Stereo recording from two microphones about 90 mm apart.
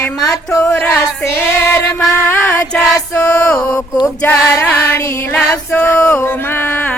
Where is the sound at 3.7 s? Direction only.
40° left (ahead or behind).